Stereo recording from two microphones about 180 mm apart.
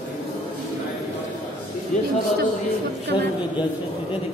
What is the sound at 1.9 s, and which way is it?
Speech, 40° left (ahead or behind).